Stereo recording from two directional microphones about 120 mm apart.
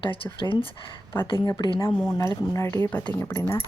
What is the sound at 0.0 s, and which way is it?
Speech, 45° left (ahead or behind).